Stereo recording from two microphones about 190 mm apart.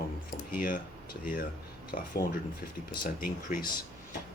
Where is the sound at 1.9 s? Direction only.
50° left (ahead or behind).